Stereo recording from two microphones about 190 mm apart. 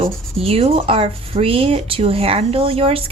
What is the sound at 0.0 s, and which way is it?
Speech, 30° right (ahead or behind).